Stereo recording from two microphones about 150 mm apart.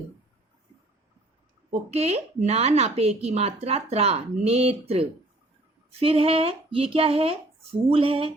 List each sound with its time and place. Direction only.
1.7 s a woman's voice: 45° right (ahead or behind)